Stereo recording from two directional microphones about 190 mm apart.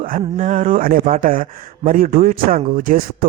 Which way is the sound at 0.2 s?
35° right (ahead or behind).